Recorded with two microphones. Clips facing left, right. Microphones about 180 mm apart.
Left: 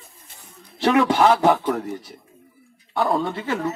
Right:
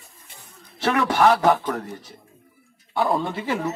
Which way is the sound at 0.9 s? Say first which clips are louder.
Left 3 dB; 25° left (ahead or behind).